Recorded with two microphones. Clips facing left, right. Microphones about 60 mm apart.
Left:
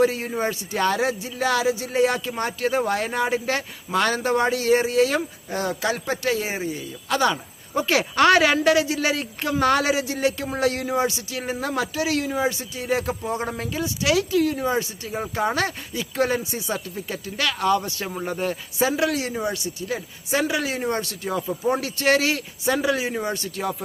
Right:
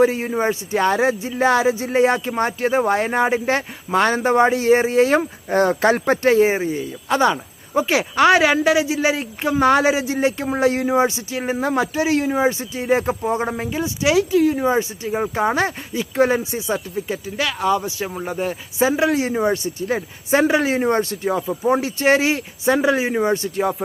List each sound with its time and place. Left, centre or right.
0.0 s speech: right
18.8 s speech: right